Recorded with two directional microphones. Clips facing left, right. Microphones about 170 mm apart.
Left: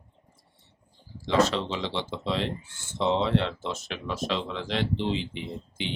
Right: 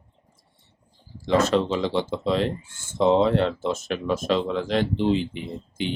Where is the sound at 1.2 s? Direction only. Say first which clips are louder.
Right 4 dB; 50° right (ahead or behind).